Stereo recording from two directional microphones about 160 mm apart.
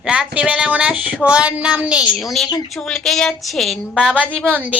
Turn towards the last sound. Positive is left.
turn(degrees=-10)  # may be behind; listen again after turning